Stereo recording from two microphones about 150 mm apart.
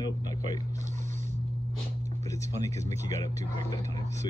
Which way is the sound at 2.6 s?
25° left (ahead or behind).